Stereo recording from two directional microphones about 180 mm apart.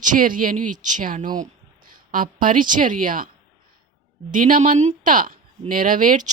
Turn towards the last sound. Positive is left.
turn(degrees=-45)  # may be behind; listen again after turning